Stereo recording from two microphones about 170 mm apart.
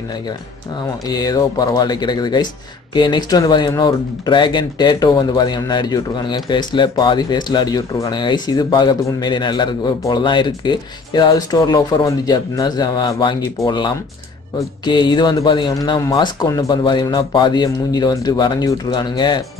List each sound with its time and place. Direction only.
1.0 s speech: 20° left (ahead or behind)